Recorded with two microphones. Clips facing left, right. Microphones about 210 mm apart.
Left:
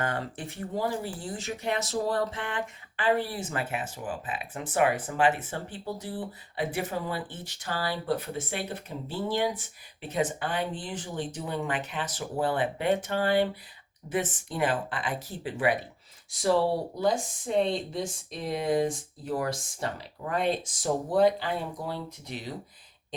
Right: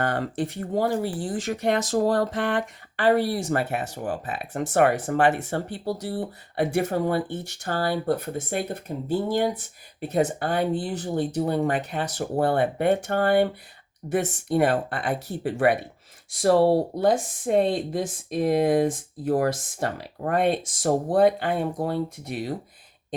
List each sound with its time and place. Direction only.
0.2 s speech: 50° right (ahead or behind); by 1.3 s 70° right (ahead or behind)
1.6 s speech: 80° right
1.9 s speech: 45° right (ahead or behind)
2.3 s speech: 75° right (ahead or behind)
3.6 s speech: 40° right (ahead or behind)
3.8 s speech: 65° right (ahead or behind)
6.8 s speech: 55° right (ahead or behind); by 11.8 s 40° right (ahead or behind)
12.0 s speech: 60° right (ahead or behind)